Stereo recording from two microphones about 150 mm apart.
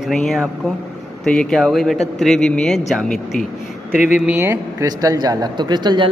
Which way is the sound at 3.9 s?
55° left (ahead or behind).